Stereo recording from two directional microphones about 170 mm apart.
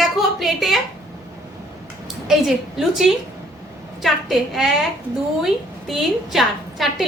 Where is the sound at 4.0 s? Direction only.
Centre (ahead or behind).